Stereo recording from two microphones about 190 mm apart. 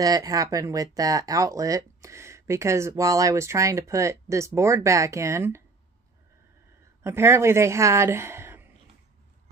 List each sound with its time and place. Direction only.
0.0 s speech: 20° right (ahead or behind)
7.0 s speech: 15° right (ahead or behind)